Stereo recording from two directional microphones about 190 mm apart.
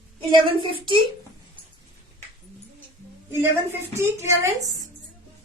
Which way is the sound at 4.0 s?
15° right (ahead or behind).